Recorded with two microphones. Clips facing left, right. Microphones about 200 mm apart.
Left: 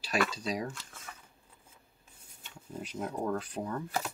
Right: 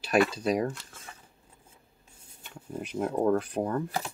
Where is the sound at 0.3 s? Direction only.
55° right (ahead or behind).